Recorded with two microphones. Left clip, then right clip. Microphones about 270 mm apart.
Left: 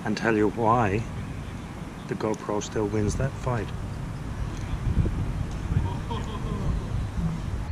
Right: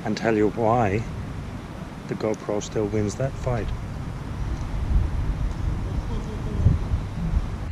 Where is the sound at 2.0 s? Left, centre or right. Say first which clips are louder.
Right 2 dB; centre.